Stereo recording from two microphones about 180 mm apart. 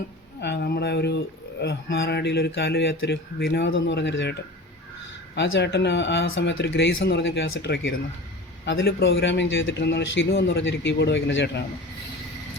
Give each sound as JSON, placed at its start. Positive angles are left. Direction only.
{"t": 0.4, "sound": "a man's voice", "side_deg": 65}
{"t": 5.3, "sound": "a man's voice", "side_deg": 70}